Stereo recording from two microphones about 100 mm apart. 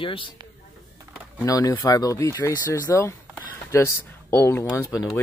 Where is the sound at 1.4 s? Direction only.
35° left (ahead or behind).